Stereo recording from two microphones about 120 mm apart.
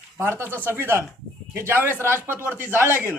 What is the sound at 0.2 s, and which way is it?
Speech, 20° right (ahead or behind).